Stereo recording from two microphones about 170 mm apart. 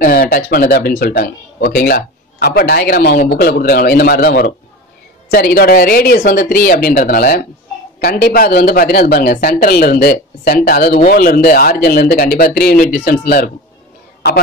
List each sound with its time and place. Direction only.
0.0 s a man's voice: 55° left (ahead or behind)